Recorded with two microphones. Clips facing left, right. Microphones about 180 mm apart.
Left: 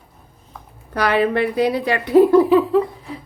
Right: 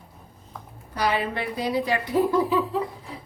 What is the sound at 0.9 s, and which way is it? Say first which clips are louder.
Speech: left 8 dB; 65° left (ahead or behind).